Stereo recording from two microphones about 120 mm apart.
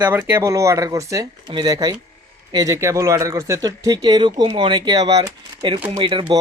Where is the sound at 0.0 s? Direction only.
15° right (ahead or behind); by 2.7 s 35° right (ahead or behind).